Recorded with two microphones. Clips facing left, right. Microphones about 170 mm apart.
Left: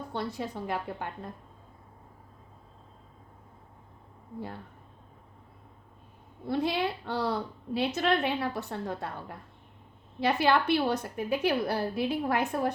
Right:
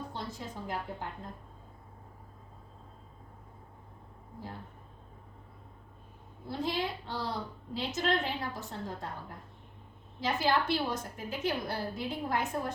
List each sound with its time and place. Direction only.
0.1 s a woman's voice: 65° left (ahead or behind)
6.5 s a woman's voice: 65° left (ahead or behind)